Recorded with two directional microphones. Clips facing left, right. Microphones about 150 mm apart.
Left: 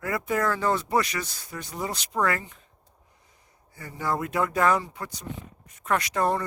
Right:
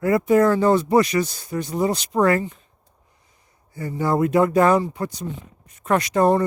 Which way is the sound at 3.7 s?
30° right (ahead or behind).